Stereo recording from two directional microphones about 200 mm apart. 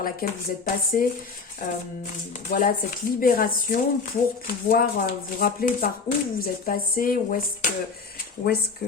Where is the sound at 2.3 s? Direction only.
40° left (ahead or behind).